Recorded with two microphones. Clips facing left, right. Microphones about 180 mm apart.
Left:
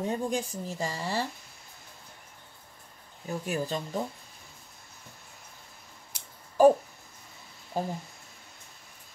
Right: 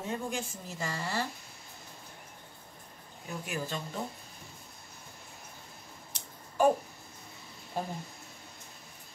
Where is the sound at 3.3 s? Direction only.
35° left (ahead or behind).